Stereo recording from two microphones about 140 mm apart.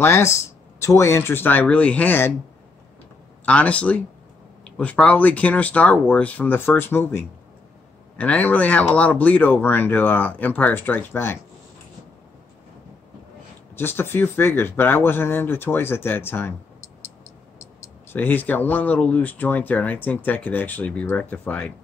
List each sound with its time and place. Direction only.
0.0 s speech: 20° left (ahead or behind)
3.4 s speech: 10° left (ahead or behind)
13.7 s speech: 15° left (ahead or behind)
18.1 s speech: 15° left (ahead or behind)